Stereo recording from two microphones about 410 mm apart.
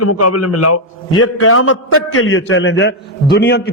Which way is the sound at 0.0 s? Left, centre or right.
Left.